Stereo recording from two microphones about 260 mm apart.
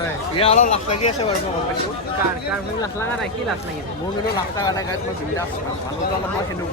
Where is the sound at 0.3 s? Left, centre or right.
Left.